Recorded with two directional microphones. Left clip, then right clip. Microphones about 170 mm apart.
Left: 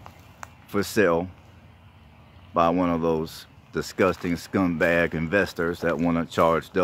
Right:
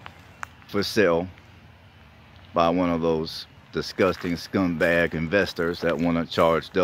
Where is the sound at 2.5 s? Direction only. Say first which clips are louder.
Even; centre (ahead or behind).